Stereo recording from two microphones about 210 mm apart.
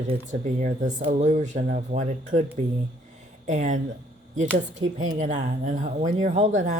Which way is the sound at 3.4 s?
35° right (ahead or behind).